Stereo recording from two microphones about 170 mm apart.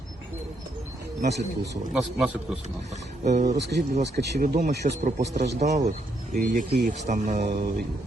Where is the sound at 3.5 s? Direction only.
80° right; by 4.7 s 60° right (ahead or behind).